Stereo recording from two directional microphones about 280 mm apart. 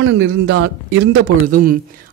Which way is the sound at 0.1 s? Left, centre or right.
Right.